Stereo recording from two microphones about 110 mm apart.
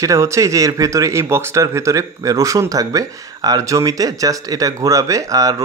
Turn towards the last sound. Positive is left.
turn(degrees=-30)  # may be behind; listen again after turning